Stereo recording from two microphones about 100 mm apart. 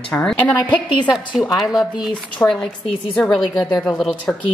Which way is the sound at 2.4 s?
20° left (ahead or behind).